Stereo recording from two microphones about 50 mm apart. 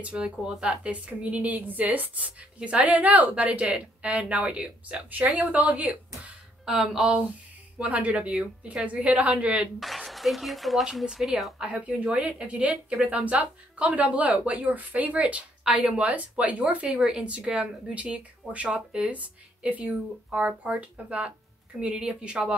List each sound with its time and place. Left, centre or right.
0.0 s a woman's voice: right
6.6 s speech: centre
7.8 s speech: right
9.8 s speech: centre
11.8 s speech: right